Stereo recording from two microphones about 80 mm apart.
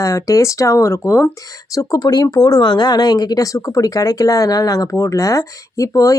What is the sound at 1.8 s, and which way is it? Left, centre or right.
Speech, left.